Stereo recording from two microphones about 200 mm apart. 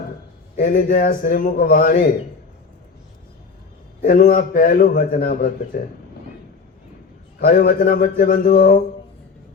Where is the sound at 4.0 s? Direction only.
40° left (ahead or behind).